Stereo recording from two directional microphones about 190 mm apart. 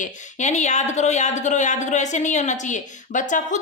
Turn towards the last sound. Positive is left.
turn(degrees=40)  # may be behind; listen again after turning